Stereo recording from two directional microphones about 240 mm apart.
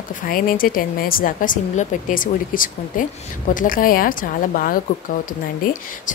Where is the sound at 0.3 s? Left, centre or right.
Left.